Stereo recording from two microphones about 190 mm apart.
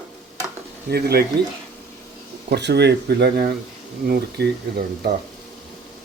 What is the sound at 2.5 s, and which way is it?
Speech, 65° right (ahead or behind).